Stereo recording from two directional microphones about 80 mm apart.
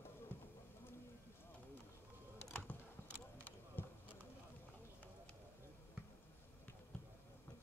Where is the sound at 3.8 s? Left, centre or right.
Left.